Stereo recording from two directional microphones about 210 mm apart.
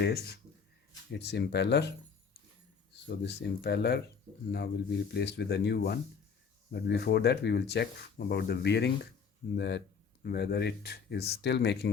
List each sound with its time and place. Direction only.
0.0 s speech: 50° left (ahead or behind)
2.9 s speech: 50° left (ahead or behind)